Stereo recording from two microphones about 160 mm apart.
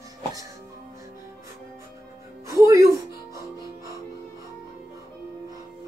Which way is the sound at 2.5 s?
20° right (ahead or behind).